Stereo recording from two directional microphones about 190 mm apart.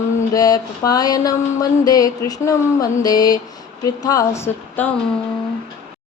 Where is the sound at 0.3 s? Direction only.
20° left (ahead or behind).